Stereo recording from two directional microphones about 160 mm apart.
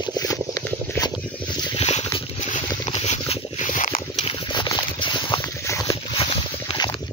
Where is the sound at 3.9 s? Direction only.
35° left (ahead or behind).